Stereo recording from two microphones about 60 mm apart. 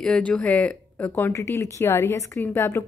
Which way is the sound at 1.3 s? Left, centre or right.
Left.